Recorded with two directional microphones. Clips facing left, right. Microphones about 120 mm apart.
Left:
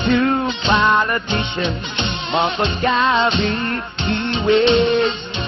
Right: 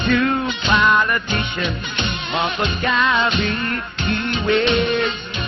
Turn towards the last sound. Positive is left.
turn(degrees=25)  # may be behind; listen again after turning